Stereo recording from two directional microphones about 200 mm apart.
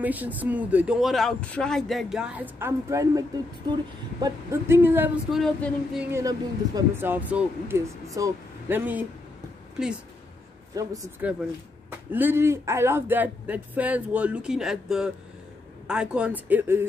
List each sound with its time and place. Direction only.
0.0 s speech: 10° right (ahead or behind)
6.1 s speech: 15° right (ahead or behind)
10.7 s speech: 15° right (ahead or behind)